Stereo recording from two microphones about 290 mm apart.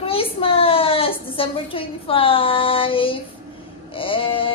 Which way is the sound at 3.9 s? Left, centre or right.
Centre.